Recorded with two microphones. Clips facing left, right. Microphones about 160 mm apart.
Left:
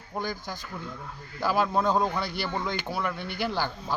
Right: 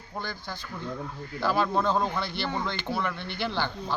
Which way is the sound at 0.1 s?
10° left (ahead or behind).